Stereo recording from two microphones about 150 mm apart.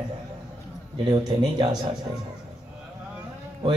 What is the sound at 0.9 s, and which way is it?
Speech, 30° right (ahead or behind).